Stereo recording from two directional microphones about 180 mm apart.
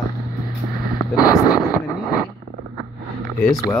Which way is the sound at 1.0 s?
20° left (ahead or behind).